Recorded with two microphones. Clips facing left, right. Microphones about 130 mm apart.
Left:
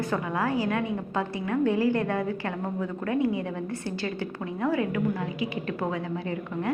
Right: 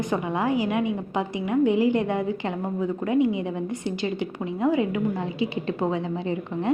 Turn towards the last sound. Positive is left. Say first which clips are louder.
# right 4 dB
turn(degrees=-25)  # may be behind; listen again after turning